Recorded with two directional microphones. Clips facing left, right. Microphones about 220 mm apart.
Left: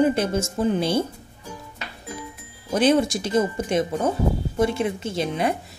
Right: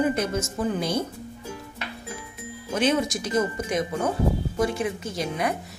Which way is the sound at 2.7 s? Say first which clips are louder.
Left 4 dB; 35° left (ahead or behind).